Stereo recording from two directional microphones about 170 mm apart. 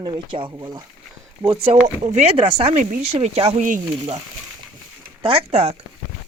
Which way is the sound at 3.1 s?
35° right (ahead or behind).